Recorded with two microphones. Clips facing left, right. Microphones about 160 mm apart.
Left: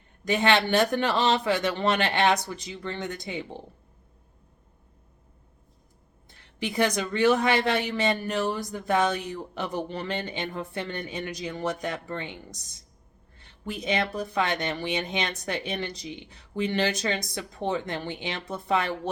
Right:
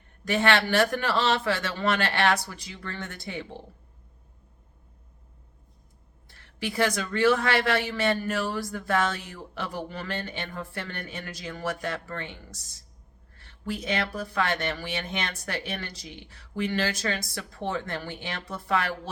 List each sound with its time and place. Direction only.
0.3 s a man's voice: 20° left (ahead or behind)
6.2 s a man's voice: 20° left (ahead or behind)